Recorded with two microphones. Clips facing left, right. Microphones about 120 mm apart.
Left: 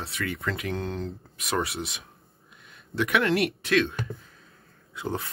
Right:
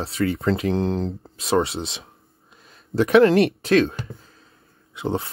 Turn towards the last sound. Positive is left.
turn(degrees=-25)  # may be behind; listen again after turning